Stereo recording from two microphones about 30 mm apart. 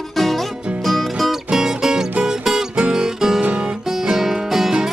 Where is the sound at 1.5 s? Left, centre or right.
Centre.